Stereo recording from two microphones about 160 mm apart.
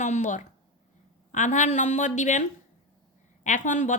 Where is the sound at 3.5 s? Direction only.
50° left (ahead or behind).